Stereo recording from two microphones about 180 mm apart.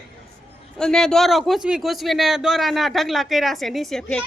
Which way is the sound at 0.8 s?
5° left (ahead or behind).